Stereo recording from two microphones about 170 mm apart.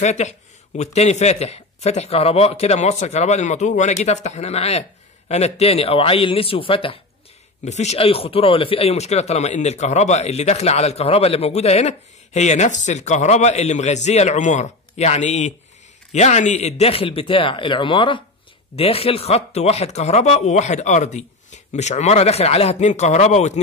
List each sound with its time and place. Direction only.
0.0 s speech: 45° left (ahead or behind)